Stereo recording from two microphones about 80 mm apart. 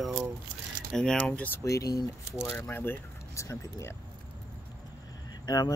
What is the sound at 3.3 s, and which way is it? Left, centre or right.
Speech, left.